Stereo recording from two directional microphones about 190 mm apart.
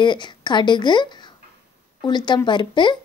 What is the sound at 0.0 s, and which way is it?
A woman's voice, 25° left (ahead or behind).